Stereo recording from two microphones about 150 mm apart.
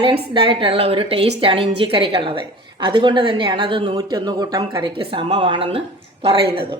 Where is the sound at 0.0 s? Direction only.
40° right (ahead or behind).